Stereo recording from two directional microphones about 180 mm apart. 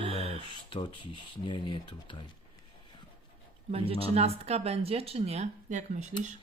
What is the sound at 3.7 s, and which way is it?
Speech, 35° right (ahead or behind).